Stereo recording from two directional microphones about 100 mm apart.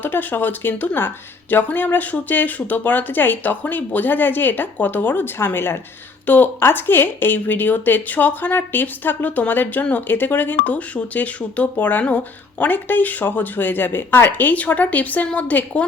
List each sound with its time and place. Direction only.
0.0 s speech: 20° left (ahead or behind)